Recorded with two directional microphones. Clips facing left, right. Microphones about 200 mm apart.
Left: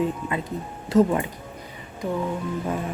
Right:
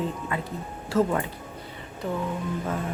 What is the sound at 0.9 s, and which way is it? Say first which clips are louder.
Speech: left 4 dB; 15° left (ahead or behind).